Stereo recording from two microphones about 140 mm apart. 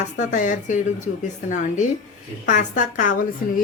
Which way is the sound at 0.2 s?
70° left (ahead or behind).